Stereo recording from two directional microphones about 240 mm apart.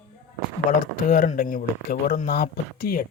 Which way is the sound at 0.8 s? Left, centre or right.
Left.